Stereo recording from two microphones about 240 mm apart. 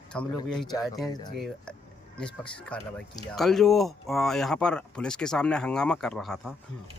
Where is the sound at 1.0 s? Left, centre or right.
Centre.